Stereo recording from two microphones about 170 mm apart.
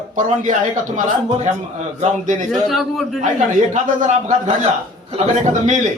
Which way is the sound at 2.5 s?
Centre (ahead or behind).